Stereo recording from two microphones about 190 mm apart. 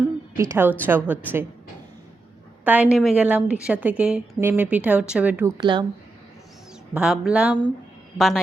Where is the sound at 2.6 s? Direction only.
5° right (ahead or behind).